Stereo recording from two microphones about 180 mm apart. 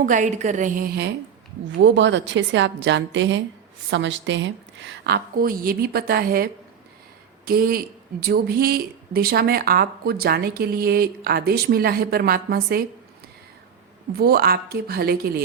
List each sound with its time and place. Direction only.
0.0 s a woman's voice: 45° right (ahead or behind)
1.8 s a woman's voice: 90° right; by 12.8 s 60° right (ahead or behind)
14.2 s a woman's voice: 60° right (ahead or behind)